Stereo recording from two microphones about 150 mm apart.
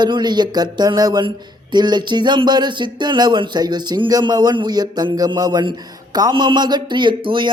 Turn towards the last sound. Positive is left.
turn(degrees=-35)  # may be behind; listen again after turning